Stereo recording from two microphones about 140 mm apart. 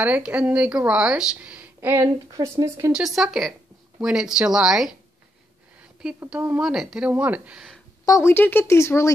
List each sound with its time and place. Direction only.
0.0 s a woman's voice: 10° right (ahead or behind)
2.9 s speech: 5° right (ahead or behind)
6.1 s a woman's voice: 15° right (ahead or behind)
8.0 s speech: 20° left (ahead or behind)